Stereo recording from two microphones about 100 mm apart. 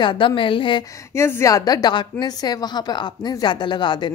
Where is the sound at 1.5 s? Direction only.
40° left (ahead or behind).